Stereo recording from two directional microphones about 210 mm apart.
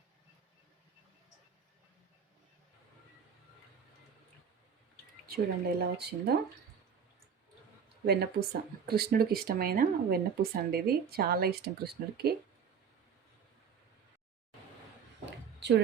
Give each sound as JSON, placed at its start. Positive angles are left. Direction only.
{"t": 5.3, "sound": "speech", "side_deg": -45}
{"t": 8.0, "sound": "speech", "side_deg": -50}
{"t": 15.3, "sound": "a sound", "side_deg": -55}